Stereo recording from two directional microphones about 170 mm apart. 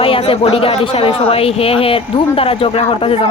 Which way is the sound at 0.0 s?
35° left (ahead or behind).